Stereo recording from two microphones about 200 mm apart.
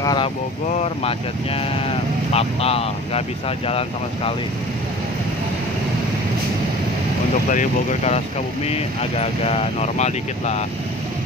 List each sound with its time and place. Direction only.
0.0 s speech: 20° left (ahead or behind)
7.5 s speech: 35° left (ahead or behind)
9.2 s speech: 30° left (ahead or behind)